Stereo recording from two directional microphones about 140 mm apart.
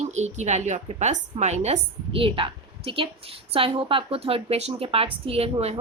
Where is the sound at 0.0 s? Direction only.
55° right (ahead or behind).